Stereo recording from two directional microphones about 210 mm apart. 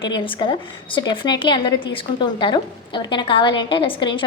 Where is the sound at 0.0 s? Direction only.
25° left (ahead or behind).